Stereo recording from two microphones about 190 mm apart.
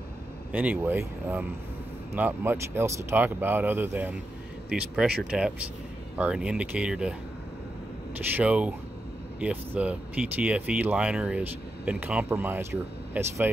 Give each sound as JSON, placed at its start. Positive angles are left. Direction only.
{"t": 0.5, "sound": "speech", "side_deg": -5}
{"t": 8.4, "sound": "speech", "side_deg": -5}